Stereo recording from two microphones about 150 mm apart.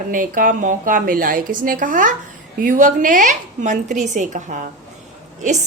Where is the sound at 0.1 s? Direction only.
65° right (ahead or behind).